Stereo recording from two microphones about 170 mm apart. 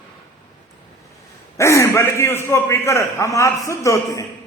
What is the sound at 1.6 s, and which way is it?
A man's voice, 15° left (ahead or behind).